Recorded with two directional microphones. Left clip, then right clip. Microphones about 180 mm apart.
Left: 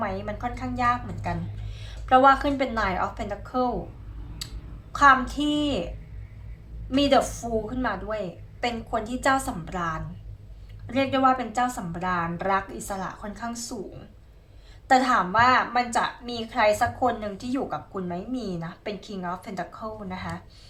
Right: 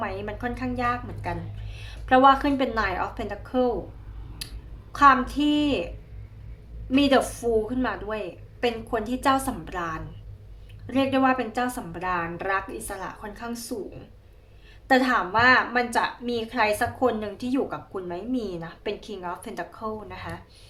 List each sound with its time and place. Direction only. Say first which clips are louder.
0.0 s a woman's voice: left 1 dB; 35° right (ahead or behind)
4.9 s a woman's voice: even; 30° right (ahead or behind)
6.9 s a woman's voice: even; 30° right (ahead or behind)
14.8 s a woman's voice: left 1 dB; 30° right (ahead or behind)